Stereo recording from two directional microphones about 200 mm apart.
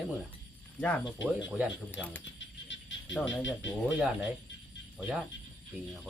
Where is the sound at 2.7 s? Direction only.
65° left (ahead or behind).